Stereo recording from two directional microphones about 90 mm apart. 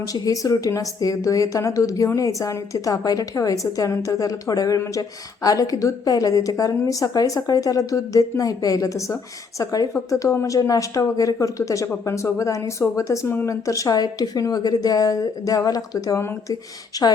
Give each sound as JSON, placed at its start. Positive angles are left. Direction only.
{"t": 0.0, "sound": "a woman's voice", "side_deg": 40}
{"t": 16.2, "sound": "speech", "side_deg": 30}
{"t": 16.9, "sound": "speech", "side_deg": 45}